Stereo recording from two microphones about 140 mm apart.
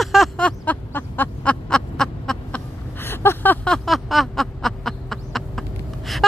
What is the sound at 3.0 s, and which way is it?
Vehicle, 15° left (ahead or behind).